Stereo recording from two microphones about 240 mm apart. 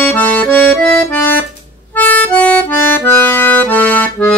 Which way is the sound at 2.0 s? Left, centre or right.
Centre.